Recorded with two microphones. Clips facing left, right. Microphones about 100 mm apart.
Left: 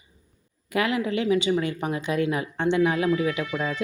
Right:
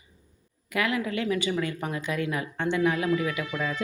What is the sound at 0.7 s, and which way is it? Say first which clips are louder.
Speech: left 3 dB; 25° left (ahead or behind).